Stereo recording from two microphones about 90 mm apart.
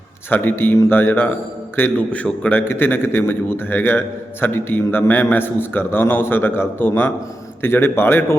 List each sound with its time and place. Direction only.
0.3 s a man's voice: 20° left (ahead or behind)